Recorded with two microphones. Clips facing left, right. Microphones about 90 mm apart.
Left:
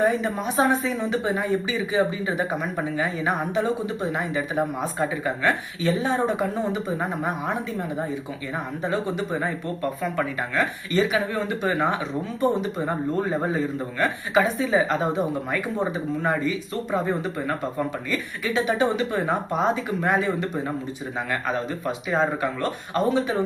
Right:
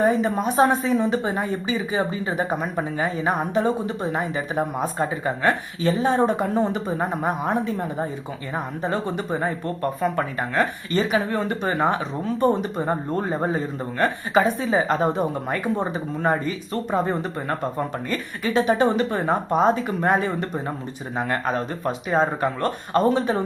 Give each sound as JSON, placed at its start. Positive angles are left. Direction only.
{"t": 0.0, "sound": "speech", "side_deg": -40}
{"t": 8.9, "sound": "speech", "side_deg": -35}
{"t": 12.8, "sound": "speech", "side_deg": -30}